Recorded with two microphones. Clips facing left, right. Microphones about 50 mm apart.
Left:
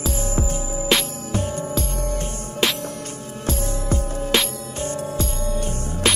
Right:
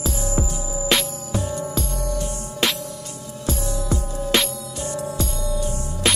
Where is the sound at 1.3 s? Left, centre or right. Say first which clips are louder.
Left 1 dB; left.